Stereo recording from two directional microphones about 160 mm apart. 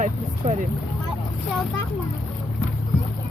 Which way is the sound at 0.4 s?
55° right (ahead or behind).